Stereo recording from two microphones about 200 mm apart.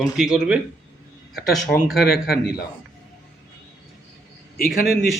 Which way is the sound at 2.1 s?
50° left (ahead or behind).